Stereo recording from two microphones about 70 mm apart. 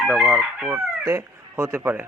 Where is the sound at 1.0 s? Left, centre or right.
Right.